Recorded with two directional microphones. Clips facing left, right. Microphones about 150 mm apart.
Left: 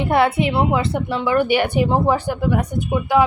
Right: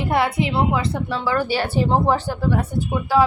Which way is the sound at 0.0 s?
25° left (ahead or behind).